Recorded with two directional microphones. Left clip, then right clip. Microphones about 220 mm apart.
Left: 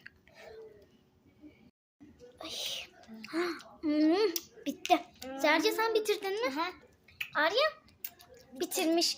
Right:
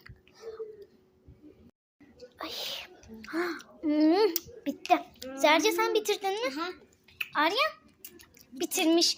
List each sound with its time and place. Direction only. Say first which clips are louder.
2.1 s whispering: right 3 dB; 10° right (ahead or behind)
5.2 s a child's voice: right 4 dB; 15° right (ahead or behind)
6.5 s speech: even; 20° left (ahead or behind)
7.2 s a child's voice: right 2 dB; 5° right (ahead or behind)